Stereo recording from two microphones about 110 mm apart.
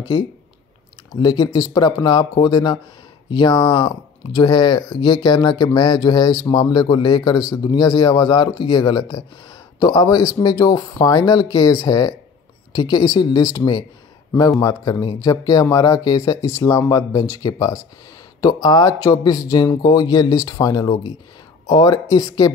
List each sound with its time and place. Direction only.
1.2 s speech: 40° left (ahead or behind)